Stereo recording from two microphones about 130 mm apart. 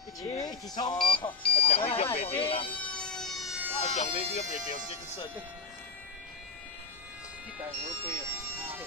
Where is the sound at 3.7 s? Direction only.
60° left (ahead or behind).